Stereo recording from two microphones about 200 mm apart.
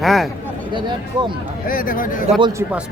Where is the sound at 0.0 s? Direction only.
Centre (ahead or behind).